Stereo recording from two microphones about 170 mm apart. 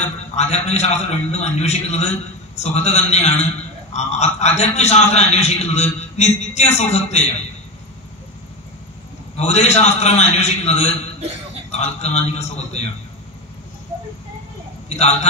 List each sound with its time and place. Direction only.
0.4 s a man's voice: 40° left (ahead or behind)
9.4 s a man's voice: 40° left (ahead or behind)